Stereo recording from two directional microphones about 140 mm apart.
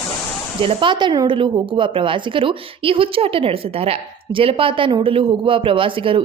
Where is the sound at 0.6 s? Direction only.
40° right (ahead or behind).